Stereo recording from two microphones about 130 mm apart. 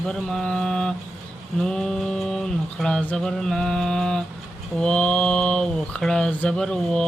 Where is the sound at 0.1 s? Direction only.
Centre (ahead or behind).